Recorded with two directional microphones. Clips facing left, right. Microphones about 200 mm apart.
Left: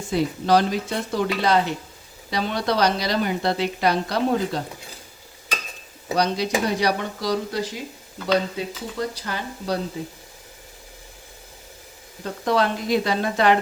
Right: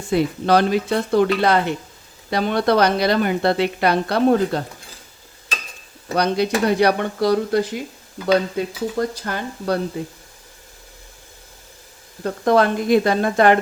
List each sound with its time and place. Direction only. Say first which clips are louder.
0.1 s a woman's voice: right 3 dB; 60° right (ahead or behind)
6.1 s a woman's voice: right 4 dB; 60° right (ahead or behind)
12.2 s speech: right 5 dB; 50° right (ahead or behind)